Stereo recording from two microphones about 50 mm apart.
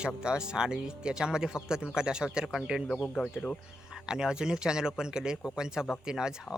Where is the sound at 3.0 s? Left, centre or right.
Left.